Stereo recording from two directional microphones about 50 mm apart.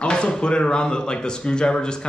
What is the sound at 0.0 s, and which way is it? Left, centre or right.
Speech, centre.